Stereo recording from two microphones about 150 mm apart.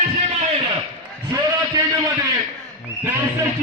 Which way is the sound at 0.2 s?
45° right (ahead or behind).